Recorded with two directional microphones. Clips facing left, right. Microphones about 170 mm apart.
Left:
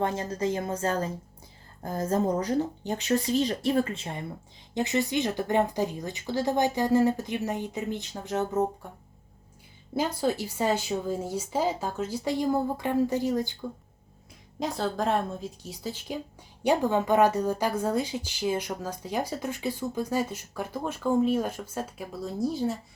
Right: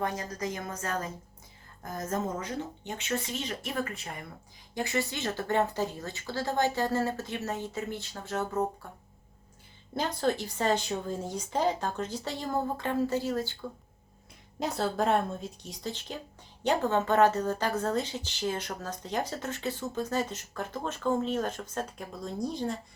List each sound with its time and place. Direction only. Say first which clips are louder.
0.0 s a woman's voice: left 5 dB; 30° left (ahead or behind)
9.9 s a woman's voice: left 2 dB; 10° left (ahead or behind)
14.6 s a woman's voice: even; centre (ahead or behind)